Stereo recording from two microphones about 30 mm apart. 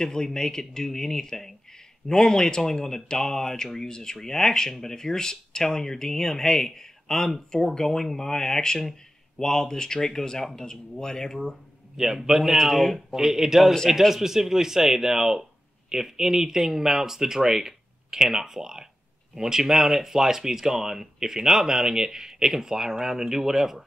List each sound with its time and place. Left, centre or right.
0.0 s speech: centre
12.0 s speech: centre
12.5 s speech: centre
13.1 s speech: centre